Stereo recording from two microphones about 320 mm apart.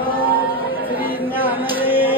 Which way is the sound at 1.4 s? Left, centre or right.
Centre.